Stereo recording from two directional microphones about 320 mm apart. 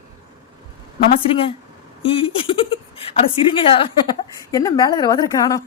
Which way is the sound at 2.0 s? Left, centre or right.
Centre.